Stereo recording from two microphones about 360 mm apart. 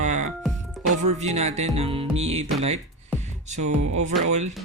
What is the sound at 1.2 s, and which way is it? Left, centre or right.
Speech, centre.